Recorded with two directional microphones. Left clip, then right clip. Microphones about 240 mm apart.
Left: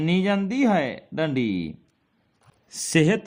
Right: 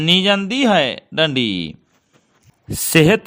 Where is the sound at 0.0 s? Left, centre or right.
Right.